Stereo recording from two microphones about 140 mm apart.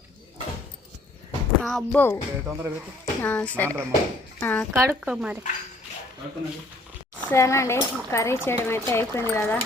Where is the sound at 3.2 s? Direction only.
10° left (ahead or behind).